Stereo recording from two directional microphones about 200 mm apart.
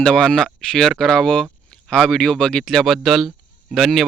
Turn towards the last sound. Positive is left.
turn(degrees=0)  # may be behind; listen again after turning